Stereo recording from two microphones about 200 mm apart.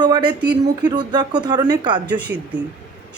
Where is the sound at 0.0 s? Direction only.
20° right (ahead or behind).